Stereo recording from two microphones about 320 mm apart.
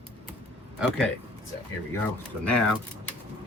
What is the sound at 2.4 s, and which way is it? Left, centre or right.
Speech, centre.